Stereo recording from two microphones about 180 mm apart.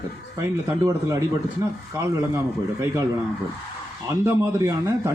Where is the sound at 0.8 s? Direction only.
20° right (ahead or behind).